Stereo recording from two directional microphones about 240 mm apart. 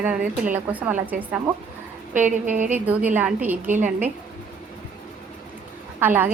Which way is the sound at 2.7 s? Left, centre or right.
Centre.